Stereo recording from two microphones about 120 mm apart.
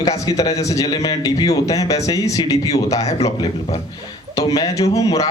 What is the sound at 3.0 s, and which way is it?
Speech, 65° left (ahead or behind).